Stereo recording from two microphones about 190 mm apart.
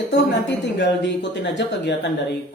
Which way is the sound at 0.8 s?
65° left (ahead or behind).